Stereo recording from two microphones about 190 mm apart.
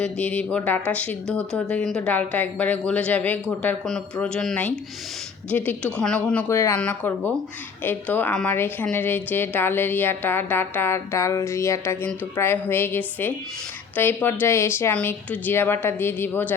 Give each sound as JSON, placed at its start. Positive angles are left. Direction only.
{"t": 0.0, "sound": "a woman's voice", "side_deg": 5}